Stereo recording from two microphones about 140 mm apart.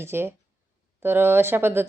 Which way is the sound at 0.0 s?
15° right (ahead or behind).